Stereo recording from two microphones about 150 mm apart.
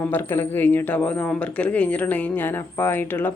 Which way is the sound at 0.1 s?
15° left (ahead or behind).